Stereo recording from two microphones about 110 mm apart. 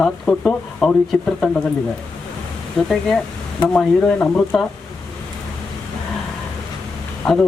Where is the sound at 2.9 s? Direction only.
5° left (ahead or behind).